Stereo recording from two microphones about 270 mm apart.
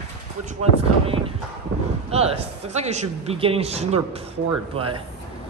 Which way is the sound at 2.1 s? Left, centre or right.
Right.